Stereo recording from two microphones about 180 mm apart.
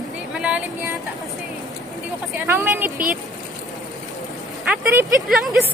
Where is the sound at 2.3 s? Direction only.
15° right (ahead or behind).